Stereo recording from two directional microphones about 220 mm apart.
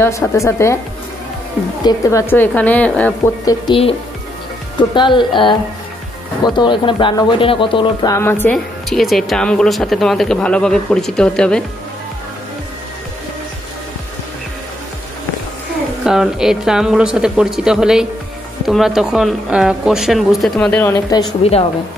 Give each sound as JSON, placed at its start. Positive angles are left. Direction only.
{"t": 0.0, "sound": "a woman's voice", "side_deg": 15}
{"t": 1.8, "sound": "a woman's voice", "side_deg": 15}
{"t": 3.6, "sound": "a woman's voice", "side_deg": 25}
{"t": 16.0, "sound": "speech", "side_deg": 0}